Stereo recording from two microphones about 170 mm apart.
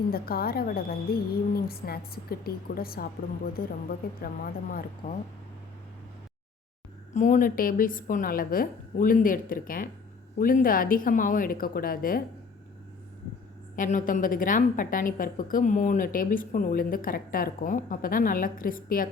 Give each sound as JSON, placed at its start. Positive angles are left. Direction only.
{"t": 0.1, "sound": "a woman's voice", "side_deg": 60}
{"t": 4.7, "sound": "a woman's voice", "side_deg": 55}
{"t": 7.1, "sound": "a woman's voice", "side_deg": 45}
{"t": 13.7, "sound": "a woman's voice", "side_deg": 50}